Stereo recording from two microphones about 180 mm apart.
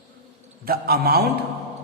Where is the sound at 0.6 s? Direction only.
60° right (ahead or behind).